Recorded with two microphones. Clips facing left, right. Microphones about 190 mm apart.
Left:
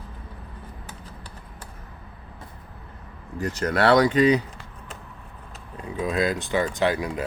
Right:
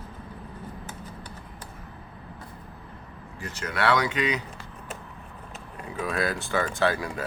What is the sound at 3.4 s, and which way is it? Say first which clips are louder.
Speech: left 6 dB; 40° left (ahead or behind).